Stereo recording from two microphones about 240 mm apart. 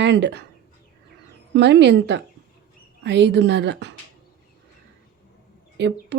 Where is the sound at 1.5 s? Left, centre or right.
Right.